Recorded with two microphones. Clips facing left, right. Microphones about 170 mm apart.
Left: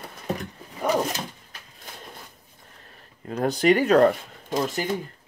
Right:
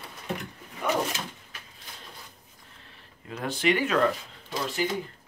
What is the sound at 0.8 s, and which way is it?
Speech, 40° left (ahead or behind).